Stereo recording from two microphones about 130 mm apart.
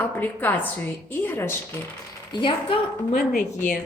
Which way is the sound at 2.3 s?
40° left (ahead or behind).